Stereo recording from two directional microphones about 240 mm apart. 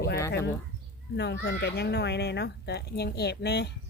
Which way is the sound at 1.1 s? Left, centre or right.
Left.